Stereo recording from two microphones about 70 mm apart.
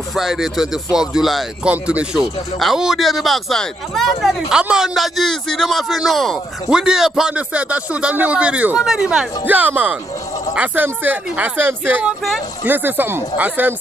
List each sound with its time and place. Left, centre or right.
0.1 s speech: centre
1.6 s speech: centre
2.1 s speech: centre
6.7 s speech: centre
7.3 s speech: centre
8.7 s speech: centre
9.5 s speech: right